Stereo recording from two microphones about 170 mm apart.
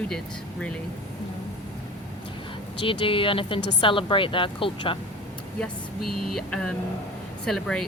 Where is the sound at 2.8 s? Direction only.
30° left (ahead or behind).